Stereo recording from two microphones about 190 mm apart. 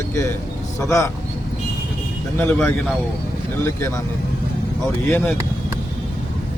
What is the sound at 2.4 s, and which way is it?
Speech, 10° left (ahead or behind).